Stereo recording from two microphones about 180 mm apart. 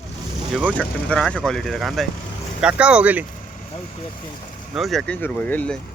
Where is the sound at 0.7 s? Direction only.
5° left (ahead or behind).